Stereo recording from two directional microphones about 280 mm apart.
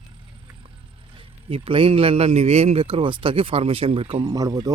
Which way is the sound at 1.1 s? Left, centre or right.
Centre.